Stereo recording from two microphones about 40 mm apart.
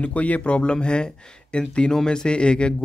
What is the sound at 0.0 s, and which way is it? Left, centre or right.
Speech, left.